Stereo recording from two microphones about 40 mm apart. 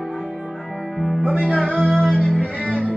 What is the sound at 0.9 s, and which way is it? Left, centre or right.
Speech, centre.